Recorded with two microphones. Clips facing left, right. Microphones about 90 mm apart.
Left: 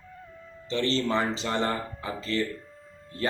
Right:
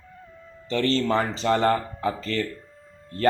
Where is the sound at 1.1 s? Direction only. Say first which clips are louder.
Right 5 dB; 40° right (ahead or behind).